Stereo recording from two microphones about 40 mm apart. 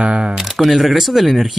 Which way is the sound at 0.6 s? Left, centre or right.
Centre.